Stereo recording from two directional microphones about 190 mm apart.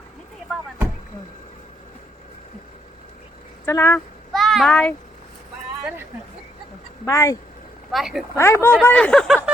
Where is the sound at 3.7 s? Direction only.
10° left (ahead or behind).